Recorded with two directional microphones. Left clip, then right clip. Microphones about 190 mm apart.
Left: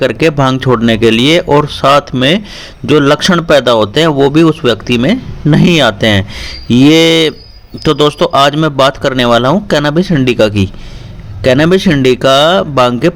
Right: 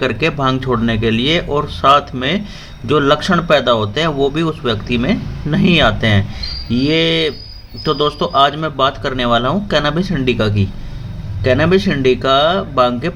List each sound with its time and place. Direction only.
0.0 s a man's voice: 45° left (ahead or behind)